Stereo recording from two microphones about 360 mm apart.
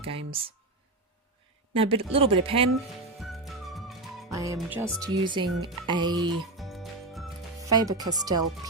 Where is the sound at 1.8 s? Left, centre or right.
Centre.